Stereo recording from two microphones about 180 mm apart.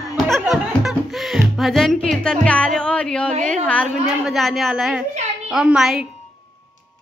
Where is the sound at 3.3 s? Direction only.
45° right (ahead or behind).